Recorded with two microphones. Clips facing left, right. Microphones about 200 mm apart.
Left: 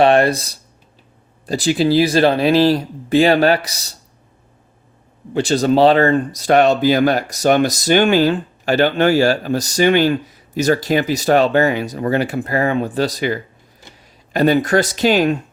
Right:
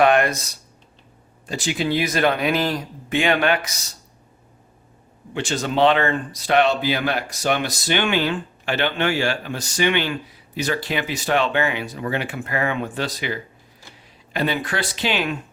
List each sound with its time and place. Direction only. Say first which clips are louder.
0.0 s speech: left 4 dB; 30° left (ahead or behind)
5.3 s speech: left 9 dB; 35° left (ahead or behind)